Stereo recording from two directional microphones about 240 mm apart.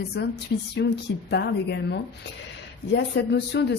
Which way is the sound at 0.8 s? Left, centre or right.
Left.